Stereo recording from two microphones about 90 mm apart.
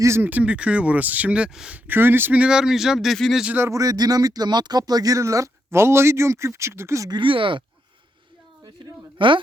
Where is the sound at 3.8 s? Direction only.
45° right (ahead or behind).